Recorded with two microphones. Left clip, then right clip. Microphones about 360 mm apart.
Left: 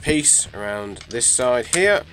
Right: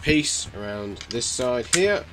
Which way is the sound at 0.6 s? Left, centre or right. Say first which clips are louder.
Left 5 dB; left.